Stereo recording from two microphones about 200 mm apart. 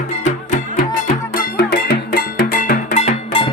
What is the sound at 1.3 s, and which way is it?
Music, 45° left (ahead or behind).